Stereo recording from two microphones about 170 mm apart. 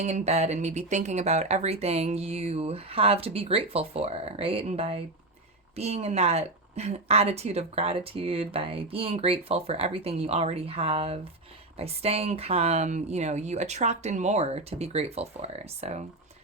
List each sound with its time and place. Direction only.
0.0 s speech: 40° right (ahead or behind)